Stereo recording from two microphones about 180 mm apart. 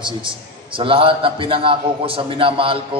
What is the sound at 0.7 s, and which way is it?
A man's voice, 30° right (ahead or behind).